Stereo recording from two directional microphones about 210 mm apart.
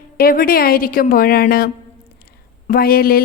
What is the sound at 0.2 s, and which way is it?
A woman's voice, 45° left (ahead or behind).